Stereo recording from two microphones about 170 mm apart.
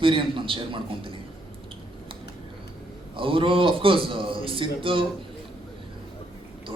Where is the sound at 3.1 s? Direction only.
30° right (ahead or behind).